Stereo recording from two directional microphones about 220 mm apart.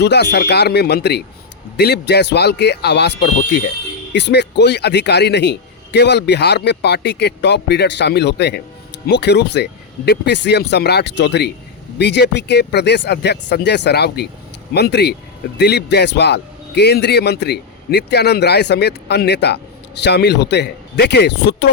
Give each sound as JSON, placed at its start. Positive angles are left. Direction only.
{"t": 0.0, "sound": "a man's voice", "side_deg": 50}